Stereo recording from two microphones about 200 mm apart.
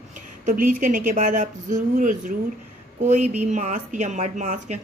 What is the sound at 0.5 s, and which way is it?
Speech, 40° right (ahead or behind).